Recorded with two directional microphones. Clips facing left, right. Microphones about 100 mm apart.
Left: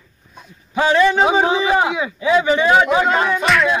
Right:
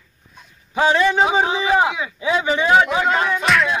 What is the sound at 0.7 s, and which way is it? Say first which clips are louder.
Speech: left 2 dB; 15° right (ahead or behind).